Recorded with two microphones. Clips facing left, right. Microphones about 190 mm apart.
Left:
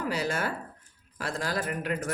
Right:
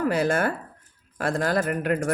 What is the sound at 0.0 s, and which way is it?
Speech, 55° right (ahead or behind).